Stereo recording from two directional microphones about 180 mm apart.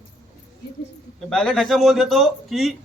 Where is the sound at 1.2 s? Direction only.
5° left (ahead or behind).